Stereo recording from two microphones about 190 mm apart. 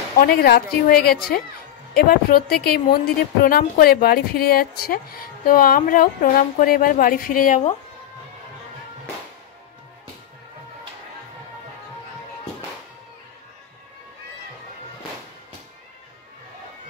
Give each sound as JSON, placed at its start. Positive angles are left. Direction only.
{"t": 0.2, "sound": "speech", "side_deg": 55}